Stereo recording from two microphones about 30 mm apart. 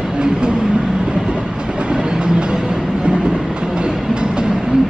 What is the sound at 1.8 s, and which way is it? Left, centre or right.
Train, right.